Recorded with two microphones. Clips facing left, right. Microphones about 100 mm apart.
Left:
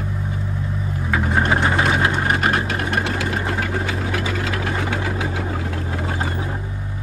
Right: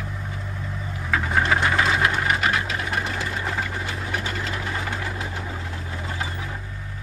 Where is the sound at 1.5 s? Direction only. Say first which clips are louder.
Left 2 dB; 30° left (ahead or behind).